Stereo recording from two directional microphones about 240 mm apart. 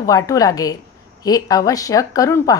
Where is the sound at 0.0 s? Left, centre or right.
Centre.